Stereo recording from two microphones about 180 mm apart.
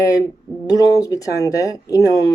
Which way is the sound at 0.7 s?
20° left (ahead or behind).